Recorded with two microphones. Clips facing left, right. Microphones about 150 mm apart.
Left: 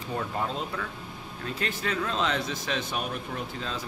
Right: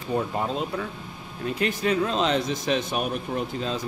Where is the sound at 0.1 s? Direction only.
20° right (ahead or behind).